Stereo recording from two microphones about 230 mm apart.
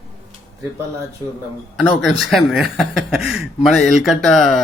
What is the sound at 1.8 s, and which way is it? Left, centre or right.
Speech, centre.